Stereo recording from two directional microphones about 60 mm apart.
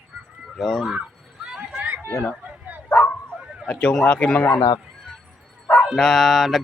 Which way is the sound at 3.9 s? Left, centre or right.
Centre.